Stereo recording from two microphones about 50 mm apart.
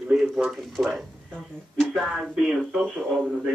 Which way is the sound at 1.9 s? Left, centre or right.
Centre.